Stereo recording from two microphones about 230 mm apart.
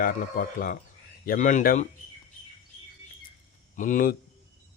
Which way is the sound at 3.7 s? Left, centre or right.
Left.